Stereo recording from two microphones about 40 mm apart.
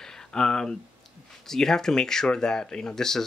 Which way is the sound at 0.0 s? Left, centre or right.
Centre.